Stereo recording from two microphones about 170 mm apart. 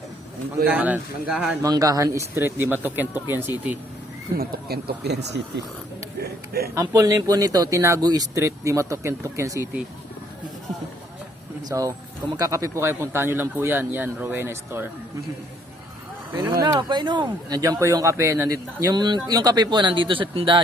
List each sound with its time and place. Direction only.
0.7 s speech: 10° right (ahead or behind)
1.6 s speech: 20° right (ahead or behind)
4.4 s speech: 65° right (ahead or behind); by 5.6 s 80° right
6.1 s speech: 65° right (ahead or behind)
6.7 s speech: 20° right (ahead or behind)
11.7 s speech: 20° right (ahead or behind)
16.4 s speech: 15° right (ahead or behind); by 20.6 s 30° right (ahead or behind)